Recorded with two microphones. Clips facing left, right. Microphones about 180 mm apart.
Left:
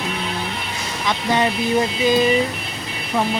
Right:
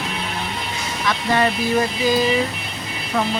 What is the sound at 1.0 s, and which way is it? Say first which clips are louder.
Speech: even; 20° left (ahead or behind).